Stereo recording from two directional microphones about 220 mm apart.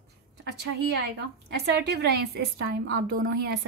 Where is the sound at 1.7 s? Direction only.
50° right (ahead or behind).